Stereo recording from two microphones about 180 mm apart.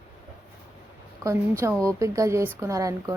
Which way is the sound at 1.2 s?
15° right (ahead or behind).